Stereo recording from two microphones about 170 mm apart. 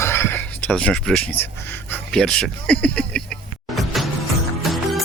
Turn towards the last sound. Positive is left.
turn(degrees=0)  # may be behind; listen again after turning